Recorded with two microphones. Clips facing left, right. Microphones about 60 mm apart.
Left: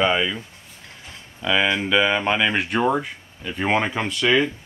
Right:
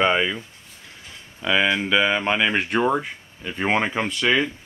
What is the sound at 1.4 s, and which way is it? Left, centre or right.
Speech, centre.